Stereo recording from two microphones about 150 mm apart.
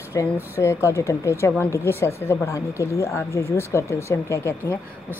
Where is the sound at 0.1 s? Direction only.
20° left (ahead or behind).